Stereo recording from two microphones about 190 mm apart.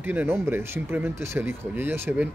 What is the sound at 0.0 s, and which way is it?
Speech, 10° right (ahead or behind).